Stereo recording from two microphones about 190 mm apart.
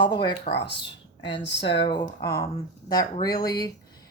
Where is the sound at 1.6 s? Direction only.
25° left (ahead or behind).